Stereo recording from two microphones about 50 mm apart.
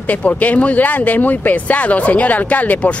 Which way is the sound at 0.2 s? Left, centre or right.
Left.